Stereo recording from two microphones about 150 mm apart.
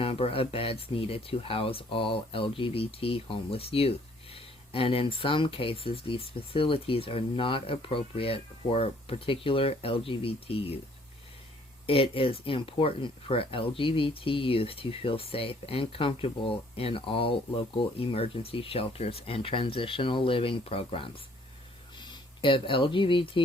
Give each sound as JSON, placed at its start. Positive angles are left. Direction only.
{"t": 0.0, "sound": "speech", "side_deg": 40}
{"t": 11.9, "sound": "speech", "side_deg": 40}